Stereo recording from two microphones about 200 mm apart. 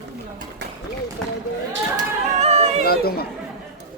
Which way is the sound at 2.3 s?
35° right (ahead or behind).